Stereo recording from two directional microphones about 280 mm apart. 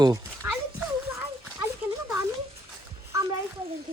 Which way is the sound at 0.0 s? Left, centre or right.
Centre.